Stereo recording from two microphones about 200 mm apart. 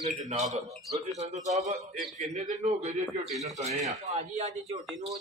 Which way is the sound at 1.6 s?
40° right (ahead or behind).